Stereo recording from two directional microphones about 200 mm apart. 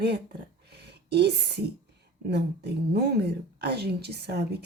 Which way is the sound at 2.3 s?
55° right (ahead or behind).